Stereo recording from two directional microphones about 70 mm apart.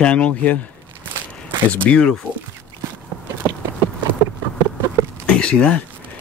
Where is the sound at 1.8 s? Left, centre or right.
Left.